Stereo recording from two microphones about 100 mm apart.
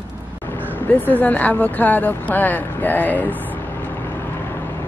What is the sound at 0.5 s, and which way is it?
Speech, 20° left (ahead or behind).